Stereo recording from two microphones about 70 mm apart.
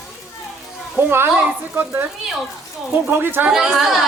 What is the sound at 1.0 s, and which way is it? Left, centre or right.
Speech, right.